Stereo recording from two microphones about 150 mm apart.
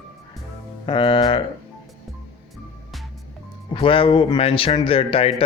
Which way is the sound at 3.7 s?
35° left (ahead or behind).